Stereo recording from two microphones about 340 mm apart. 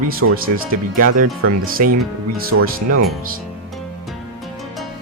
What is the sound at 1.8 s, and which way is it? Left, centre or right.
Speech, right.